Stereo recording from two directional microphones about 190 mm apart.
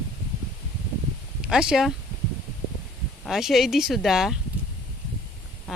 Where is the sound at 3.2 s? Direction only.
Centre (ahead or behind).